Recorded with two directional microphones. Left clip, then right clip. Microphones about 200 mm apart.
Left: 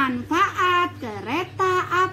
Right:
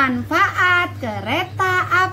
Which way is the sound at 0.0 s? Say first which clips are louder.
Right 4 dB; 30° right (ahead or behind).